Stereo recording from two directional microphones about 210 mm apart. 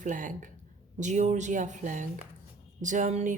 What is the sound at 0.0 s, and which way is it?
Speech, 40° right (ahead or behind).